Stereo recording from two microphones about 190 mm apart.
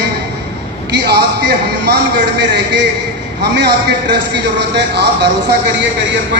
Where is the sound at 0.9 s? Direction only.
60° right (ahead or behind).